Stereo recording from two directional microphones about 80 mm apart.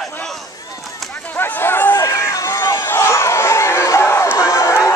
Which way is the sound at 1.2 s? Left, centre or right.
Left.